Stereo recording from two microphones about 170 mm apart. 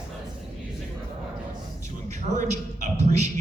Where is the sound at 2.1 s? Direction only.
45° right (ahead or behind).